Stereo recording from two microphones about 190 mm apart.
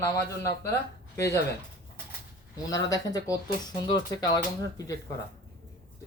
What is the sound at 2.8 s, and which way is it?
Speech, 20° left (ahead or behind).